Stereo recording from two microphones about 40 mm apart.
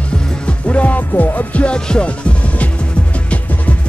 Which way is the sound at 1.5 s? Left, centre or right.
Left.